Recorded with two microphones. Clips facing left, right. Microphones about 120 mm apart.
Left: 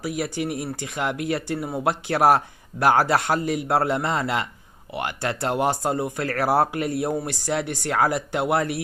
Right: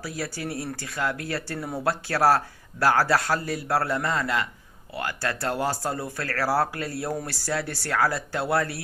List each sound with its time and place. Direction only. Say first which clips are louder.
0.0 s speech: left 6 dB; 20° left (ahead or behind)